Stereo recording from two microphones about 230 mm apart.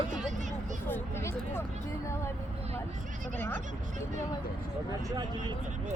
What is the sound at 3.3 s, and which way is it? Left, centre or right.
Speech, centre.